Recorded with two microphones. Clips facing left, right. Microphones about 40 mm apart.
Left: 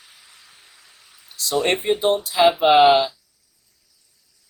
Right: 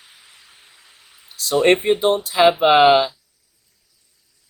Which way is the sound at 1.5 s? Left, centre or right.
Right.